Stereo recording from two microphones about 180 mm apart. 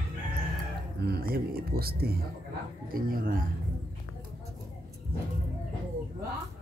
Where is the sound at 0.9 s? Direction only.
60° right (ahead or behind).